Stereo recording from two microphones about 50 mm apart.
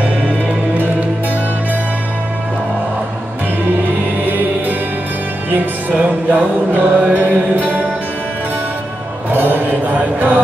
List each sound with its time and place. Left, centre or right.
3.8 s music: right
9.3 s mantra: right